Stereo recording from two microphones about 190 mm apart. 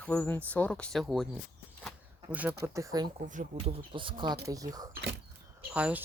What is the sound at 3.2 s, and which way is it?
Speech, 40° right (ahead or behind).